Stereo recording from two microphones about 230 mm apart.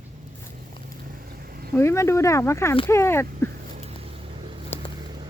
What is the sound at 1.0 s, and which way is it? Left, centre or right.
Vehicle, right.